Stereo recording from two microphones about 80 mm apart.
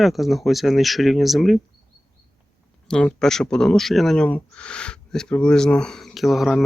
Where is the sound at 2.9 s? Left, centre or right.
Centre.